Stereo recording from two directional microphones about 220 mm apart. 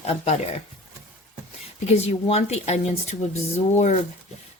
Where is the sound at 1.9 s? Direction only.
30° left (ahead or behind).